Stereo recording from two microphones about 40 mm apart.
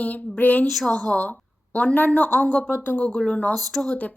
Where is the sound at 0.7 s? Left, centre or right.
Centre.